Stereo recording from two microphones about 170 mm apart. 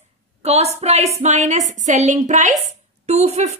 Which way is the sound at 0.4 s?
40° right (ahead or behind).